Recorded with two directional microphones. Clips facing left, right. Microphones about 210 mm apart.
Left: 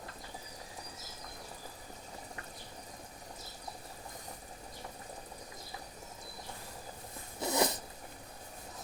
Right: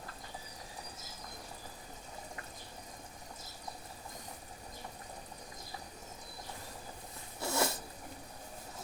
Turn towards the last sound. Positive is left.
turn(degrees=20)  # may be behind; listen again after turning